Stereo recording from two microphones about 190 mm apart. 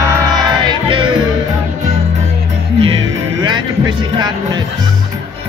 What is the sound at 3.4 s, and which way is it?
Music, 25° right (ahead or behind).